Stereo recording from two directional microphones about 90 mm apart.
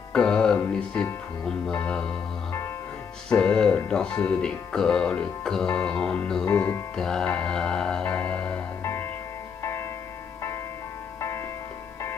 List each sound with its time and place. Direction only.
0.1 s music: 10° left (ahead or behind)
1.7 s speech: 15° left (ahead or behind)
3.3 s speech: 10° left (ahead or behind)
6.4 s speech: 30° left (ahead or behind)
7.0 s speech: 5° left (ahead or behind)
8.0 s music: 20° left (ahead or behind)
11.1 s music: 30° left (ahead or behind)